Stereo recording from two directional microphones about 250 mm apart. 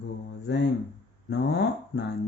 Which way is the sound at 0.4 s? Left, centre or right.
Left.